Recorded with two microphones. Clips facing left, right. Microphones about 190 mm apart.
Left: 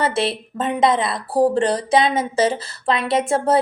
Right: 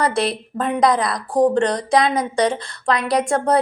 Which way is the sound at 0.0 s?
5° left (ahead or behind).